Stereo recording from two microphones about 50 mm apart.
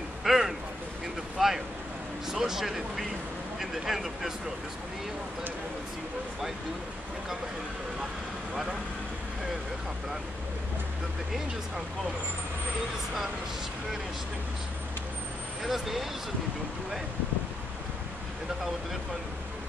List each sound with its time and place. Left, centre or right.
0.2 s a sound: centre
1.4 s vehicle: centre
2.2 s speech: centre
15.6 s speech: centre